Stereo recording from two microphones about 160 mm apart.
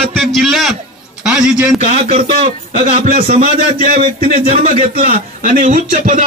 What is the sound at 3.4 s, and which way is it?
Speech, 60° right (ahead or behind).